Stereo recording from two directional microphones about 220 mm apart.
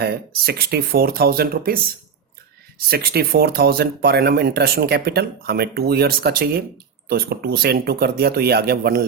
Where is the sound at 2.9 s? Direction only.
45° right (ahead or behind).